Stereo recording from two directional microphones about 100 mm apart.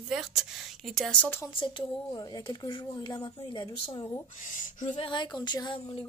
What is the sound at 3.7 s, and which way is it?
Speech, 65° left (ahead or behind).